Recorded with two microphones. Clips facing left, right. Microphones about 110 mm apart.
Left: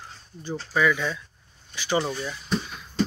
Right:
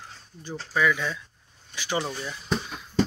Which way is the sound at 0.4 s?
10° left (ahead or behind).